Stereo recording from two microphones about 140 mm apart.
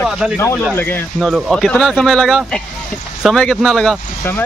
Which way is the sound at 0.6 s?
10° left (ahead or behind).